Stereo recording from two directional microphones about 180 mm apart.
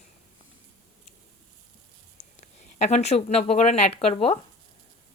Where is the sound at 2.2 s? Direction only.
40° left (ahead or behind).